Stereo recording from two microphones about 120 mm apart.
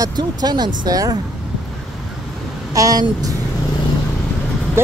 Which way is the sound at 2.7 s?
30° right (ahead or behind).